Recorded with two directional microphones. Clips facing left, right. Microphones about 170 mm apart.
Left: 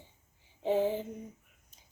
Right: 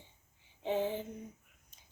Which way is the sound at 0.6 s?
40° left (ahead or behind).